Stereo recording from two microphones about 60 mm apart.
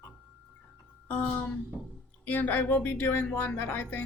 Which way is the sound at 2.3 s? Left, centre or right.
Left.